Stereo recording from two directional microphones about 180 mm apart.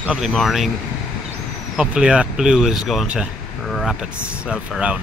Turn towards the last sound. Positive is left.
turn(degrees=-5)  # may be behind; listen again after turning